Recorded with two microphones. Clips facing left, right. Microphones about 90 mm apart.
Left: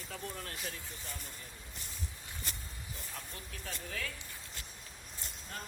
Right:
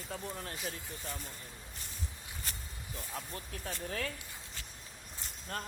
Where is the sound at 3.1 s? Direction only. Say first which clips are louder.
Right 7 dB; 35° right (ahead or behind).